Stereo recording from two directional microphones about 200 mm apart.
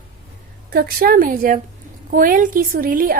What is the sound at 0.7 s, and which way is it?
A woman's voice, 50° right (ahead or behind).